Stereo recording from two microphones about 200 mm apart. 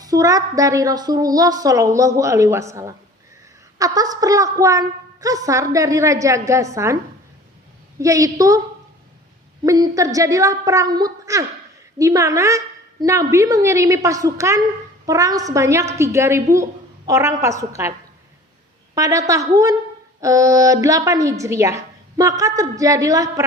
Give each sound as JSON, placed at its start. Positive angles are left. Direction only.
{"t": 0.0, "sound": "a woman's voice", "side_deg": -15}
{"t": 7.9, "sound": "a woman's voice", "side_deg": -15}
{"t": 9.6, "sound": "a woman's voice", "side_deg": -20}
{"t": 18.9, "sound": "a woman's voice", "side_deg": -15}